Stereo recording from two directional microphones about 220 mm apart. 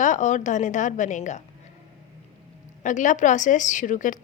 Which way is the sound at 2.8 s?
35° left (ahead or behind).